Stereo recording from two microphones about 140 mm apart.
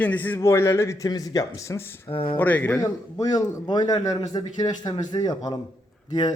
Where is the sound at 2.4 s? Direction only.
10° left (ahead or behind).